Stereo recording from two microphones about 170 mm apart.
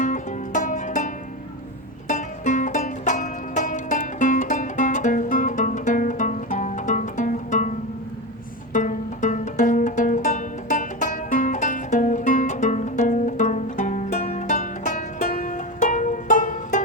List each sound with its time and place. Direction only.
0.0 s music: 45° left (ahead or behind)
8.7 s music: 45° left (ahead or behind)